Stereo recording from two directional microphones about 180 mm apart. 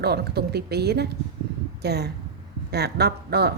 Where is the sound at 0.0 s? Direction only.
65° right (ahead or behind).